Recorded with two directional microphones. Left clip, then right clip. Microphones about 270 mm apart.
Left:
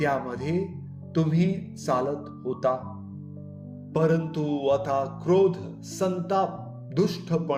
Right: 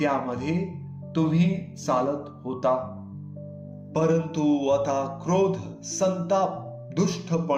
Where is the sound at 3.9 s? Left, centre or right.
Left.